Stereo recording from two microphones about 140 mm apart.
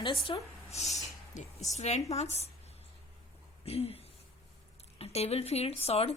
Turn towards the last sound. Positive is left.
turn(degrees=45)  # may be behind; listen again after turning